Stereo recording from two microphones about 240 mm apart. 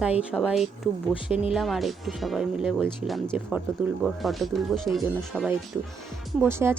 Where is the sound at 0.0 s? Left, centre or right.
Centre.